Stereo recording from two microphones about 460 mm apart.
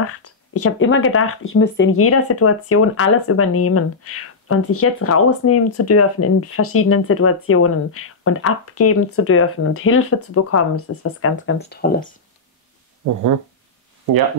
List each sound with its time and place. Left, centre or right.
0.0 s speech: left
13.0 s speech: right